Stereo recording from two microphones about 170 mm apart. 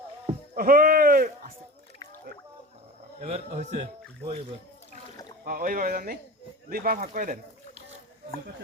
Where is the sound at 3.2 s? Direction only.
40° right (ahead or behind).